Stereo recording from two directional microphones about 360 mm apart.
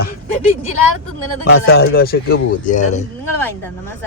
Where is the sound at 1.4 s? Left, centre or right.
Left.